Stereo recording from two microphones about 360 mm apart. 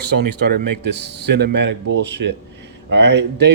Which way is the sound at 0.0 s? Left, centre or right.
Right.